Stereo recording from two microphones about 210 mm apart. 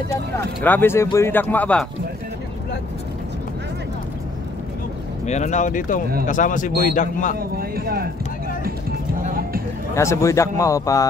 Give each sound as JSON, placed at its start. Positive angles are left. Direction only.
{"t": 0.7, "sound": "speech", "side_deg": 10}
{"t": 5.2, "sound": "speech", "side_deg": 35}
{"t": 7.3, "sound": "speech", "side_deg": -45}
{"t": 9.2, "sound": "music", "side_deg": -45}
{"t": 9.9, "sound": "speech", "side_deg": 15}